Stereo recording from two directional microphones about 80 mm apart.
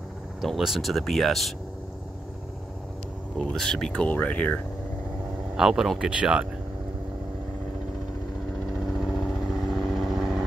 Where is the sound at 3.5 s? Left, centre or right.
Centre.